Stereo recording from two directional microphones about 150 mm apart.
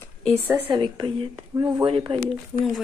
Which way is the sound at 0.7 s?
25° right (ahead or behind).